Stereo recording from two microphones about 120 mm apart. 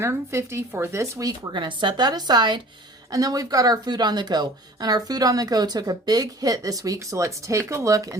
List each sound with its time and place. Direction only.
0.0 s speech: 20° right (ahead or behind)
1.5 s speech: 40° right (ahead or behind); by 8.1 s 25° right (ahead or behind)